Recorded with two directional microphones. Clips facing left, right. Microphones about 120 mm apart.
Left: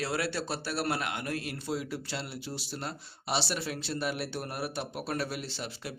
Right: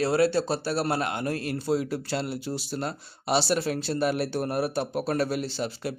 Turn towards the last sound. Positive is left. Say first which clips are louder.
# right 8 dB
turn(degrees=-40)  # may be behind; listen again after turning